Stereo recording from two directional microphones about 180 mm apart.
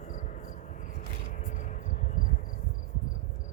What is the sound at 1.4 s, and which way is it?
Cricket, 45° left (ahead or behind).